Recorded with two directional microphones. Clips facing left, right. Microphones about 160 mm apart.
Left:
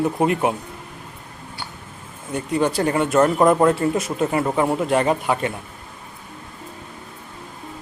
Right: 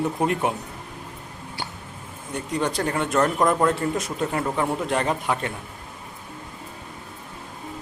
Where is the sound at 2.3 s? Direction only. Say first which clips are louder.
Left 5 dB; 5° left (ahead or behind).